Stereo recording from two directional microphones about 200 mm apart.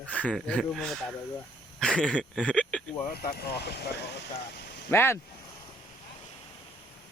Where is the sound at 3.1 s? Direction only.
50° left (ahead or behind).